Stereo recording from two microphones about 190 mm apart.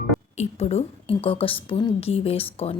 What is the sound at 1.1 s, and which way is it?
A woman's voice, 30° left (ahead or behind).